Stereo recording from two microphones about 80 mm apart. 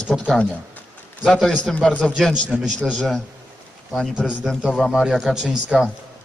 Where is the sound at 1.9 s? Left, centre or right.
Centre.